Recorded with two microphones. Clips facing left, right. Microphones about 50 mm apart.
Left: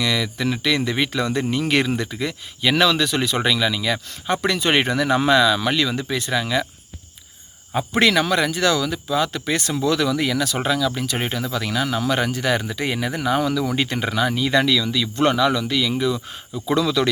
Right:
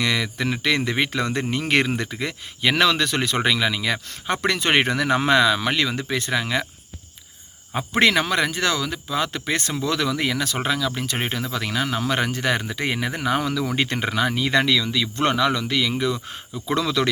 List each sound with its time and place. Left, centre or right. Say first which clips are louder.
0.0 s speech: left 1 dB; right
7.9 s speech: left 1 dB; right